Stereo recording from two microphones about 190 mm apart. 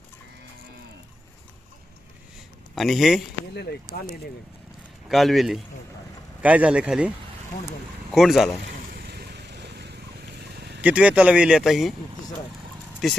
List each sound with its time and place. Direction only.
2.7 s speech: centre (ahead or behind)
3.5 s speech: 60° left (ahead or behind)
5.0 s speech: centre (ahead or behind)
8.1 s speech: centre (ahead or behind)
8.9 s vehicle: 55° right (ahead or behind)
10.8 s speech: 5° right (ahead or behind)